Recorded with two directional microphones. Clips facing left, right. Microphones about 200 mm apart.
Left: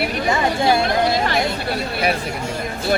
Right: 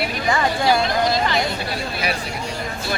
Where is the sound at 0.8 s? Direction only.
55° left (ahead or behind).